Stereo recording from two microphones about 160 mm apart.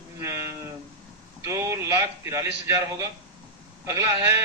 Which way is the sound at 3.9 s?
20° right (ahead or behind).